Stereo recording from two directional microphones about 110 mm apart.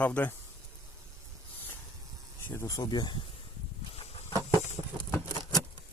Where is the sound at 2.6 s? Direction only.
35° left (ahead or behind).